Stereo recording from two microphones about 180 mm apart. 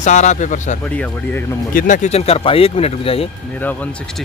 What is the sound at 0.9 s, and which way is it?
Speech, 10° left (ahead or behind).